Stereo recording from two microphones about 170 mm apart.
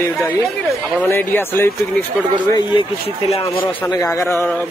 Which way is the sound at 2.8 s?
35° left (ahead or behind).